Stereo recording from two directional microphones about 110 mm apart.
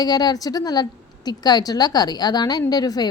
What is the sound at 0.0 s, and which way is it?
A woman's voice, 35° left (ahead or behind).